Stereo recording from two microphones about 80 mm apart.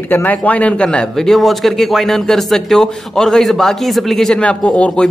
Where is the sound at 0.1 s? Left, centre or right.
Left.